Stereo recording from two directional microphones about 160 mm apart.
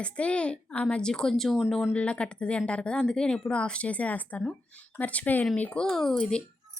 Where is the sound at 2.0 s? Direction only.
5° left (ahead or behind).